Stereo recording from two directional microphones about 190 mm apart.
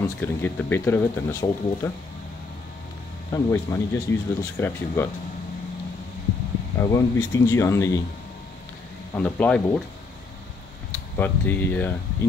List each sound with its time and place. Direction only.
0.2 s speech: 10° left (ahead or behind)
3.3 s speech: 15° left (ahead or behind)
6.8 s speech: 15° left (ahead or behind)
9.1 s speech: 10° left (ahead or behind)
11.1 s speech: 10° left (ahead or behind)